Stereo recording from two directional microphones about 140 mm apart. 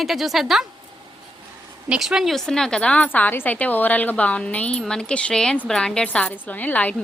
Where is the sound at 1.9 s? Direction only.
5° right (ahead or behind).